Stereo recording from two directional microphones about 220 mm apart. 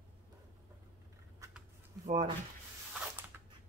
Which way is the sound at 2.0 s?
30° right (ahead or behind).